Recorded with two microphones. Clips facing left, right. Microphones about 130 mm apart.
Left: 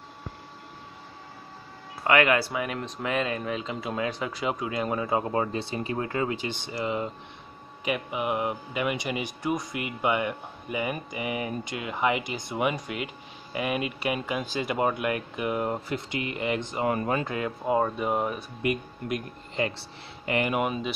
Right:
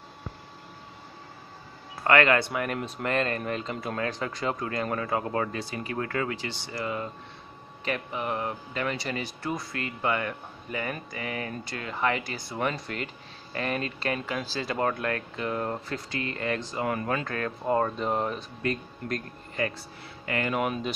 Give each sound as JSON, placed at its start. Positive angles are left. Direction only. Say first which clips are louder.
{"t": 2.0, "sound": "speech", "louder": "even", "side_deg": 15}
{"t": 2.5, "sound": "speech", "louder": "right 1 dB", "side_deg": 0}
{"t": 20.6, "sound": "speech", "louder": "even", "side_deg": 5}